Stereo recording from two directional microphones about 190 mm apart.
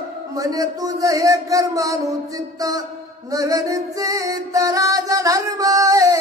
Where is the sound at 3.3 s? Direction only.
20° right (ahead or behind).